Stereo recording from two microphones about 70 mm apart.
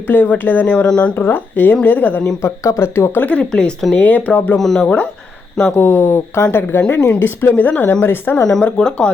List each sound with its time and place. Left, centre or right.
0.1 s speech: left
1.1 s speech: left
2.2 s speech: left
3.2 s speech: centre
4.5 s speech: centre
5.7 s speech: left
8.6 s speech: centre